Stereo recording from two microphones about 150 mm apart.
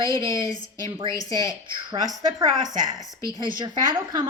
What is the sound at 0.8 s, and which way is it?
Speech, 35° right (ahead or behind).